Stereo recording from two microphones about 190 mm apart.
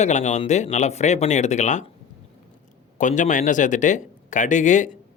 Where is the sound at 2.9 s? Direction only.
40° left (ahead or behind).